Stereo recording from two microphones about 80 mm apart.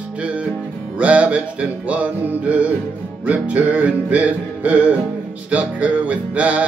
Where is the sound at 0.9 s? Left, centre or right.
Centre.